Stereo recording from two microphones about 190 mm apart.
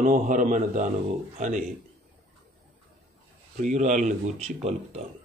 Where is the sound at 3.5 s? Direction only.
40° right (ahead or behind).